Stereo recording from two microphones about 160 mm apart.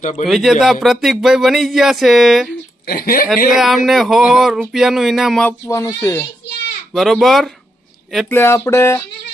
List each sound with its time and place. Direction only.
0.0 s speech: 50° left (ahead or behind)
0.3 s speech: centre (ahead or behind)
2.8 s a woman's voice: 75° left (ahead or behind)
3.5 s speech: centre (ahead or behind)
5.5 s speech: 20° left (ahead or behind)
6.9 s speech: centre (ahead or behind)
8.3 s speech: 15° left (ahead or behind)